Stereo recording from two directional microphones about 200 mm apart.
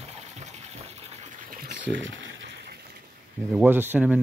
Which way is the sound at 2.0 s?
70° right (ahead or behind).